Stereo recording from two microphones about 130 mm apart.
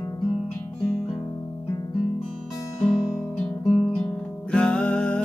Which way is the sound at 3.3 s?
5° left (ahead or behind).